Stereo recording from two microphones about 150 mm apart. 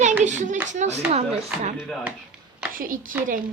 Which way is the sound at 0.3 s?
55° right (ahead or behind).